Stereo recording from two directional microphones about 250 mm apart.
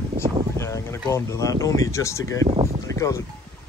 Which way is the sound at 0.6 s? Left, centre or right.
Centre.